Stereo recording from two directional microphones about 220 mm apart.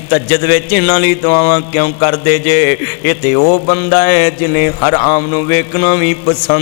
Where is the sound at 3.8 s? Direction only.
15° left (ahead or behind).